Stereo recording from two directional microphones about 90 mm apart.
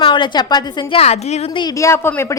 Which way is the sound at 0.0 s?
60° left (ahead or behind).